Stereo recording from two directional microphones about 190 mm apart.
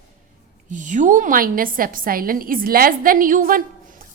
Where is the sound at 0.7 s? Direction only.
40° right (ahead or behind).